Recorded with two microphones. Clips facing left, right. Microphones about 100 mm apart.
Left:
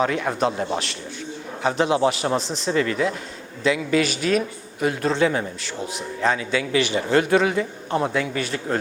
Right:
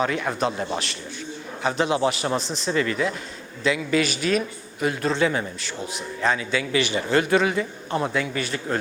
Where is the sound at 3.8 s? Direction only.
70° left (ahead or behind).